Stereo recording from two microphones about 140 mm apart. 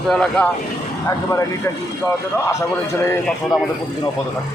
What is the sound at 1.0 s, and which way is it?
Speech, 20° left (ahead or behind).